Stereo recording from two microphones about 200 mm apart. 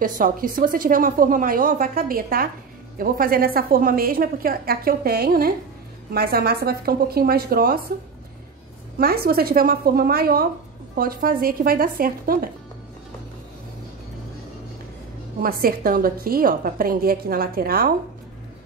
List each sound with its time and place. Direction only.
0.0 s a woman's voice: 45° right (ahead or behind)
8.9 s a woman's voice: 50° right (ahead or behind)
15.4 s a woman's voice: 45° right (ahead or behind)